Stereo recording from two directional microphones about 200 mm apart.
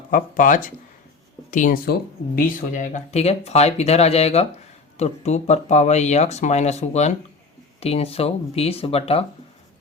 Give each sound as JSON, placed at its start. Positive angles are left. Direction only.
{"t": 0.1, "sound": "speech", "side_deg": 40}